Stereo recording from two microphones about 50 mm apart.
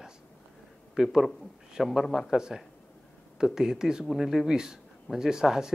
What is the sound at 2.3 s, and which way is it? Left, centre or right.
Speech, centre.